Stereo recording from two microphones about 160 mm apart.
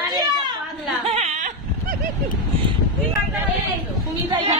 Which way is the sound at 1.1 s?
40° right (ahead or behind).